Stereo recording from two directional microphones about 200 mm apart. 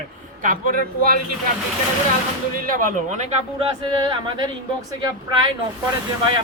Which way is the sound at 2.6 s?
45° right (ahead or behind).